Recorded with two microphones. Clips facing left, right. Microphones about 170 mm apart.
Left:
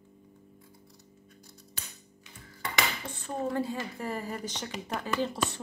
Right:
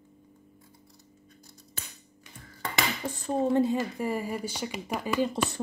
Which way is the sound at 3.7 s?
10° right (ahead or behind).